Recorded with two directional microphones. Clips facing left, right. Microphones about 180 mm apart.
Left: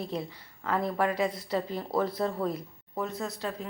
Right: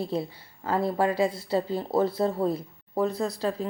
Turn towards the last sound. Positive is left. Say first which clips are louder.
# right 6 dB
turn(degrees=-35)  # may be behind; listen again after turning